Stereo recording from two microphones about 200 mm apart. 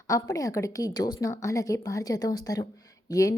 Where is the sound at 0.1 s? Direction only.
15° left (ahead or behind).